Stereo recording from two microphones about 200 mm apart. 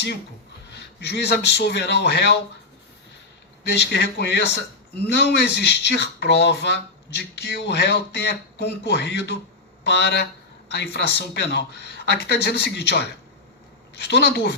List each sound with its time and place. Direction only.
0.7 s speech: 55° left (ahead or behind)
3.7 s speech: 55° left (ahead or behind)